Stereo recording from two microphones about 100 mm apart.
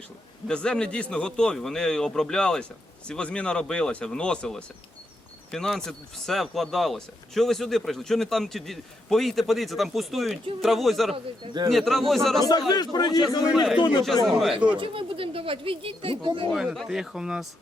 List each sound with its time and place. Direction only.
0.4 s speech: 10° left (ahead or behind)
12.5 s a man's voice: 40° left (ahead or behind)
14.3 s speech: centre (ahead or behind)
14.8 s speech: 65° right (ahead or behind)
16.5 s speech: centre (ahead or behind)